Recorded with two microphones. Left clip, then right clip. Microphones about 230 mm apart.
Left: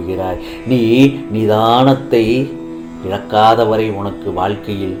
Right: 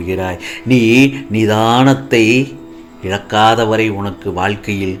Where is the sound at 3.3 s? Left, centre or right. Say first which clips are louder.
Left 1 dB; right.